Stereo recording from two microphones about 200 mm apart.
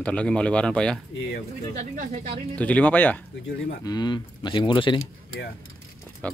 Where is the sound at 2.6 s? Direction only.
5° left (ahead or behind).